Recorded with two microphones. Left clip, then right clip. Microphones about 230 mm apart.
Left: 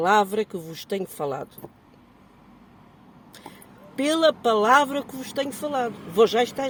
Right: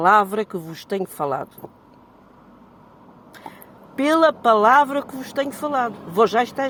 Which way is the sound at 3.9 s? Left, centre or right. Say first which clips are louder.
Right 4 dB; centre.